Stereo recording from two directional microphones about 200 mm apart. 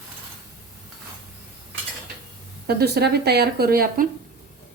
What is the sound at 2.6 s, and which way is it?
Speech, 55° right (ahead or behind).